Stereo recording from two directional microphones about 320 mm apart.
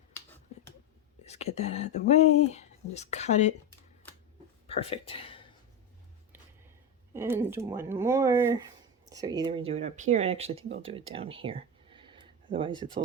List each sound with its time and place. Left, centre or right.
1.2 s speech: centre
4.6 s speech: centre
7.1 s speech: centre